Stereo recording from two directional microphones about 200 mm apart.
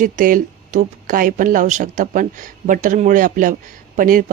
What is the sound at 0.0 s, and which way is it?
Speech, 40° right (ahead or behind).